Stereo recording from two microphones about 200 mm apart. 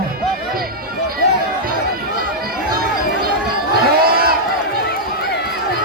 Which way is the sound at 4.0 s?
50° right (ahead or behind).